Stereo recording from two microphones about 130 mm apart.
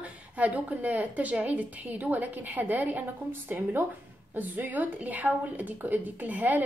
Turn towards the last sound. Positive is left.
turn(degrees=-10)  # may be behind; listen again after turning